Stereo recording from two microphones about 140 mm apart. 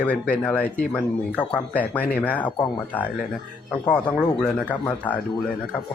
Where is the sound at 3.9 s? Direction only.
5° left (ahead or behind).